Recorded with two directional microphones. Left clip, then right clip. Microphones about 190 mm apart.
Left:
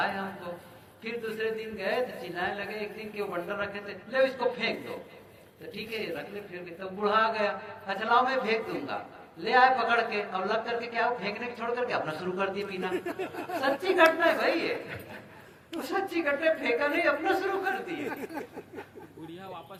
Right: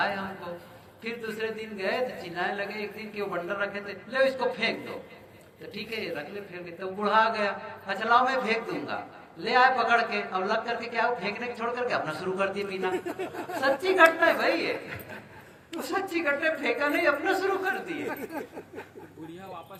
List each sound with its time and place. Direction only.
0.0 s a sound: 30° right (ahead or behind)
1.0 s speech: 30° right (ahead or behind)
12.9 s speech: 30° left (ahead or behind)
13.6 s a woman's voice: 30° right (ahead or behind)